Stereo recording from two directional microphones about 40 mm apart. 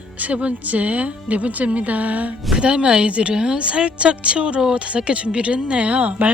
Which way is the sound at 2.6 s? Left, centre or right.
Right.